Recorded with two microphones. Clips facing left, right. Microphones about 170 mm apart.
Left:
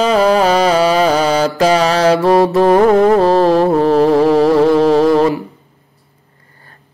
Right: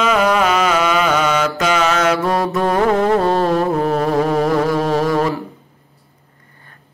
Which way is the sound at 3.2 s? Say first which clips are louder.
Left 5 dB; 35° left (ahead or behind).